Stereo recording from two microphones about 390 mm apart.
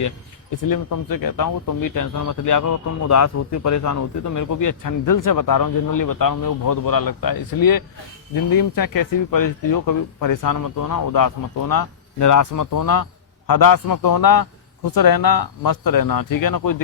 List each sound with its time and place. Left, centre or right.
0.5 s speech: left